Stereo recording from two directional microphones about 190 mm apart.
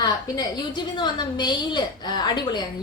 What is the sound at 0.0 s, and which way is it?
A woman's voice, 20° left (ahead or behind).